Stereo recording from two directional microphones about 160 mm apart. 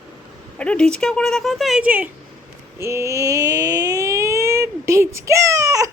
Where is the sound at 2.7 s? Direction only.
15° right (ahead or behind).